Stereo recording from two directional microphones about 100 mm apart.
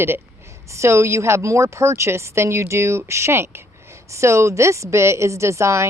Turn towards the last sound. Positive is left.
turn(degrees=-30)  # may be behind; listen again after turning